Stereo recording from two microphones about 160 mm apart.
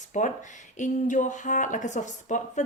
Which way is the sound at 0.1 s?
50° left (ahead or behind).